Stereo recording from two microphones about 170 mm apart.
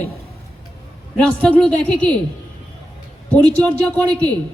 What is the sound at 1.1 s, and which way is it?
A man's voice, 5° left (ahead or behind).